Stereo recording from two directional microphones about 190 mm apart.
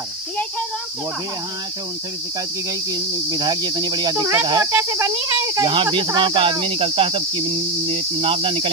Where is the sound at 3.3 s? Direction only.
20° right (ahead or behind).